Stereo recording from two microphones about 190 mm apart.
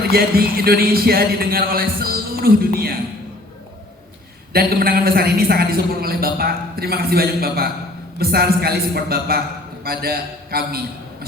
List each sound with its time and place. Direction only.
0.1 s a man's voice: 55° right (ahead or behind)
4.5 s a man's voice: 50° right (ahead or behind)